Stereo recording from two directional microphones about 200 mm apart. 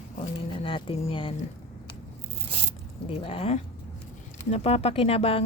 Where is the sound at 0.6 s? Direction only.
25° left (ahead or behind).